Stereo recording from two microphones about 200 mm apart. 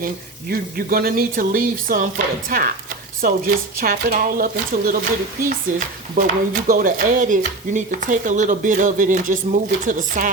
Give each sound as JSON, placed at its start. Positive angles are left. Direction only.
{"t": 0.5, "sound": "speech", "side_deg": -45}
{"t": 6.1, "sound": "speech", "side_deg": -45}